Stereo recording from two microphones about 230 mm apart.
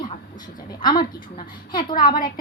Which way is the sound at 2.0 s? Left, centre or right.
Centre.